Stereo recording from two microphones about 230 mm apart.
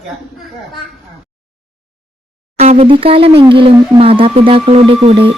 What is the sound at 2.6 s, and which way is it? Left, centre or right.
Speech, right.